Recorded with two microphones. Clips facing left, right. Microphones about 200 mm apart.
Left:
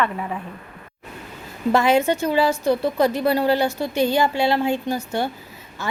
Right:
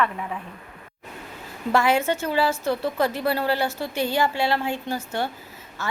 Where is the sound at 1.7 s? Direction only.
20° left (ahead or behind).